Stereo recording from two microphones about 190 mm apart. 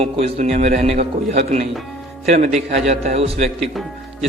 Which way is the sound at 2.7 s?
35° right (ahead or behind).